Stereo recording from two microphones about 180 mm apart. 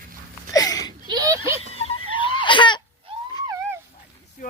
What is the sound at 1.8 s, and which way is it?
Crying, 30° left (ahead or behind).